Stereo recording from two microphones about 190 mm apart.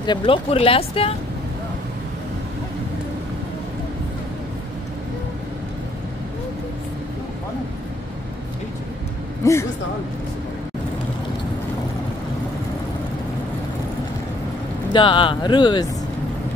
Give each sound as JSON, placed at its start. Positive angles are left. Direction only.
{"t": 0.0, "sound": "speech", "side_deg": 25}
{"t": 9.4, "sound": "a man's voice", "side_deg": 15}
{"t": 14.9, "sound": "speech", "side_deg": 25}